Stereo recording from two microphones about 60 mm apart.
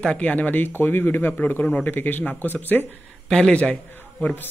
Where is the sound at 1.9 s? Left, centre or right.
Left.